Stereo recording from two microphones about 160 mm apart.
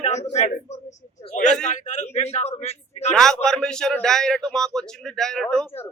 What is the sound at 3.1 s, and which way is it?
A man's voice, 5° left (ahead or behind).